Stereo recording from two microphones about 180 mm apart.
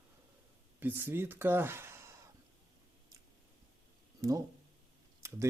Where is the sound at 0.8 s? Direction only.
10° right (ahead or behind).